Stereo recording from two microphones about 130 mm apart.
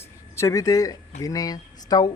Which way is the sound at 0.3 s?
25° left (ahead or behind).